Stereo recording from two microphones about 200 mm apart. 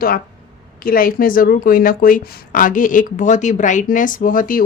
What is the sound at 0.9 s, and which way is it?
Speech, 45° left (ahead or behind).